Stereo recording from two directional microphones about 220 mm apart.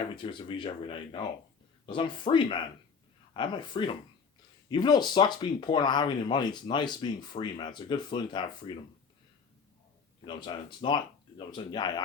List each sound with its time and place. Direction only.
0.2 s speech: 20° left (ahead or behind)
10.2 s speech: 20° left (ahead or behind)